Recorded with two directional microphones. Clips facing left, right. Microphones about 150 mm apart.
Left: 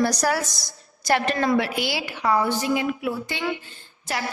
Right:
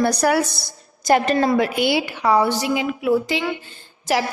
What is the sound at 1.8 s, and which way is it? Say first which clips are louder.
A woman's voice: right 6 dB; 65° right (ahead or behind).